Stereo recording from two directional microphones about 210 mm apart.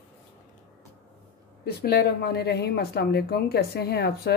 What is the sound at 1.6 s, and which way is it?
A woman's voice, 45° left (ahead or behind).